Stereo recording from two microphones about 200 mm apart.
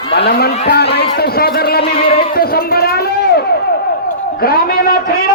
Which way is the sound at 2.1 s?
50° left (ahead or behind).